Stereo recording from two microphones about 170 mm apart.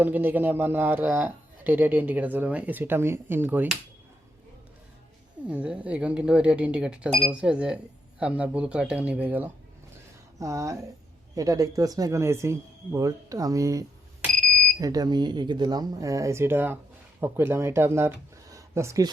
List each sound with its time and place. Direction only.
0.0 s speech: 10° right (ahead or behind)
5.5 s speech: 5° right (ahead or behind)
18.5 s a sound: 15° right (ahead or behind)